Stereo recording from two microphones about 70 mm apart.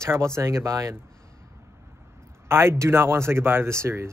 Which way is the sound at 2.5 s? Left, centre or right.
Right.